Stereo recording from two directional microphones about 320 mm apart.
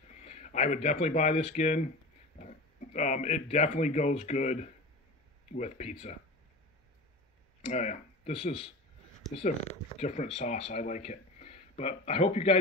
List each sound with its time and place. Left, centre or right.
0.2 s speech: left
7.6 s speech: left